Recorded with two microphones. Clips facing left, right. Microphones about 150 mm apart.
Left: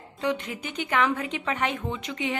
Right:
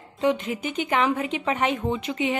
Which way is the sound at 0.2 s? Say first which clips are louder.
Right 5 dB; 15° right (ahead or behind).